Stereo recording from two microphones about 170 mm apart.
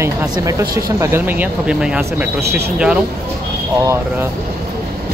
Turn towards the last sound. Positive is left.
turn(degrees=-20)  # may be behind; listen again after turning